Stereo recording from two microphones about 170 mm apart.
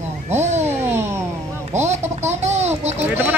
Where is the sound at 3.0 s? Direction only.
10° right (ahead or behind).